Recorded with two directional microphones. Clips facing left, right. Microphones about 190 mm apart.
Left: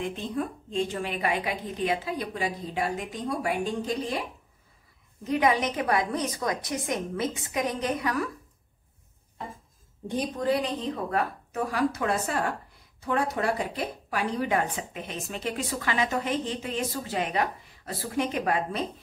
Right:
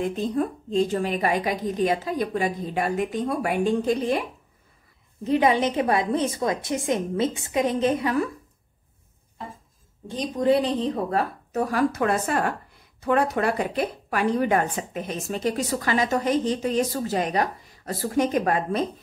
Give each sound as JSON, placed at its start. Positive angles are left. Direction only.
{"t": 0.0, "sound": "a woman's voice", "side_deg": -40}
{"t": 5.2, "sound": "a woman's voice", "side_deg": -25}
{"t": 10.0, "sound": "a woman's voice", "side_deg": 10}
{"t": 10.4, "sound": "a woman's voice", "side_deg": -30}
{"t": 11.7, "sound": "a woman's voice", "side_deg": -55}
{"t": 14.1, "sound": "a woman's voice", "side_deg": -50}